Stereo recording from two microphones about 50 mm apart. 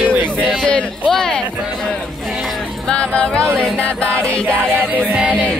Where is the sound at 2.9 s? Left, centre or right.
Left.